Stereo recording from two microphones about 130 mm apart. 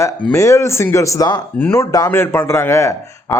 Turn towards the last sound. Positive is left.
turn(degrees=20)  # may be behind; listen again after turning